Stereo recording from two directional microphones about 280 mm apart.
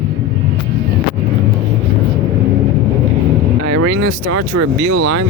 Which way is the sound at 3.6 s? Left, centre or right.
Right.